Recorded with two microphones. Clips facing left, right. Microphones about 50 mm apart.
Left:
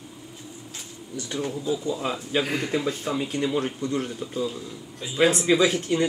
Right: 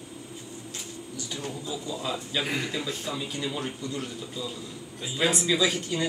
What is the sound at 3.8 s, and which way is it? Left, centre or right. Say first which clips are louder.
Speech: left 6 dB; left.